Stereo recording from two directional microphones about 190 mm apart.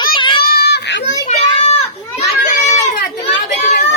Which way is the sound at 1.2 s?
35° left (ahead or behind).